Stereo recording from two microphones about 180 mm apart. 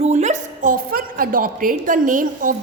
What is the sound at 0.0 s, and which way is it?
A woman's voice, 40° right (ahead or behind).